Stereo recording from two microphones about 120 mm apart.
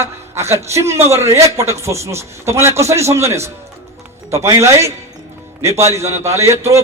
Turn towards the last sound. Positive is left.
turn(degrees=-25)  # may be behind; listen again after turning